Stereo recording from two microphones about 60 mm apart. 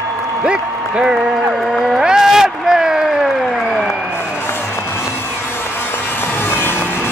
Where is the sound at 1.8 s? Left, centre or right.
Centre.